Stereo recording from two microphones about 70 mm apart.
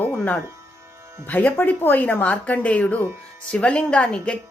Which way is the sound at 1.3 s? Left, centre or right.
Left.